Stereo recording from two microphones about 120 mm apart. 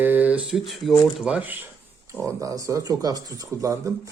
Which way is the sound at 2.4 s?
30° right (ahead or behind).